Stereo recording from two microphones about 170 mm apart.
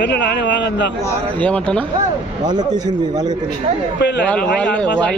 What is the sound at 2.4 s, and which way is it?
Speech, 25° right (ahead or behind).